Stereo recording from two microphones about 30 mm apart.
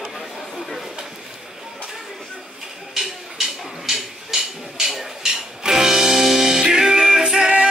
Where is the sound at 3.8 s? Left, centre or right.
Centre.